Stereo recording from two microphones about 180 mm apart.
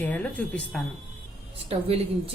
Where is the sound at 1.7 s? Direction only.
35° right (ahead or behind).